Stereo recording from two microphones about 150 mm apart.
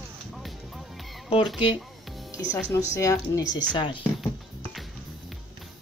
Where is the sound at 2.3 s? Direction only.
20° left (ahead or behind).